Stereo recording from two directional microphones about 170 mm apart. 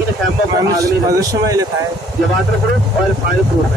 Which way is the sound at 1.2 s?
20° right (ahead or behind).